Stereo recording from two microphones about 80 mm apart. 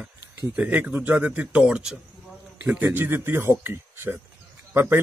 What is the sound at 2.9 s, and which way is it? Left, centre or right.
A man's voice, right.